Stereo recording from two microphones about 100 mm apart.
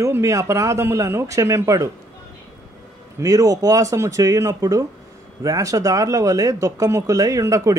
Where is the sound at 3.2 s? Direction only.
35° right (ahead or behind).